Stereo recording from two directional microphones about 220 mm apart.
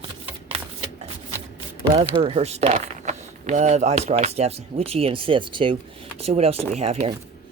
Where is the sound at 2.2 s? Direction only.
30° right (ahead or behind).